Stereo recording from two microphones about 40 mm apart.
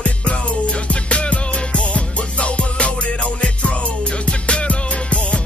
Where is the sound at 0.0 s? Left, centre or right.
Left.